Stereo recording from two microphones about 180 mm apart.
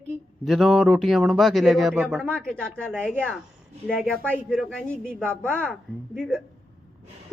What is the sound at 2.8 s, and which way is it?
Speech, 10° right (ahead or behind).